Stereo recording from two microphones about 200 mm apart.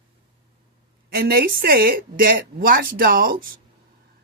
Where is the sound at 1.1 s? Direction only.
50° right (ahead or behind).